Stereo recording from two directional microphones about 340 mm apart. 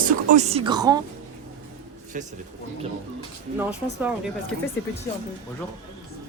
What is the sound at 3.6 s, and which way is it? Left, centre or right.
Speech, centre.